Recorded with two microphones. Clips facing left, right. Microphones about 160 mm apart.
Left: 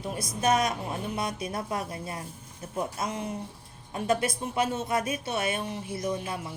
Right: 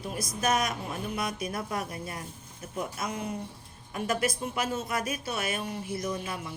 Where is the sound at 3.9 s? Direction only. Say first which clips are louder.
Left 2 dB; 30° left (ahead or behind).